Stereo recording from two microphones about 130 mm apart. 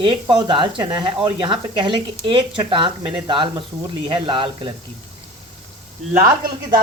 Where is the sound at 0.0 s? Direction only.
35° right (ahead or behind).